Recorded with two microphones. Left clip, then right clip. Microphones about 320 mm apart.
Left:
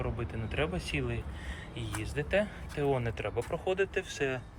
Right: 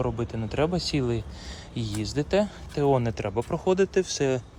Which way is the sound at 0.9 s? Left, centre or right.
Right.